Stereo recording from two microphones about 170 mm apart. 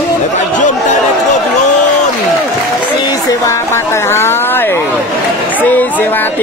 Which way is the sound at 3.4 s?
15° left (ahead or behind).